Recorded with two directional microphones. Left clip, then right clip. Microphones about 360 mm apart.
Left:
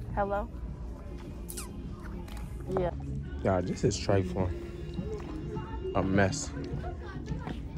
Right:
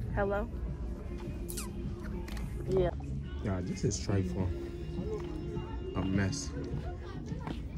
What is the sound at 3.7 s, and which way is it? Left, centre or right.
Speech, centre.